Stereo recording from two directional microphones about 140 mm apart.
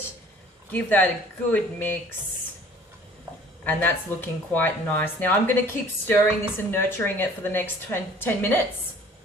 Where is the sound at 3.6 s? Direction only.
15° left (ahead or behind).